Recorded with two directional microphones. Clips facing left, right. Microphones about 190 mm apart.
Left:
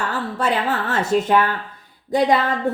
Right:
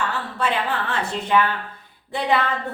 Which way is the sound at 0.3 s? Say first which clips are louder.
Left 2 dB; 40° left (ahead or behind).